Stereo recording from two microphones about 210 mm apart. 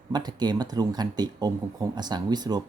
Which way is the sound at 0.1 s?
20° right (ahead or behind).